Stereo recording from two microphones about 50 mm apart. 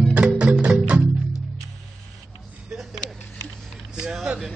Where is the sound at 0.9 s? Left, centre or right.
Right.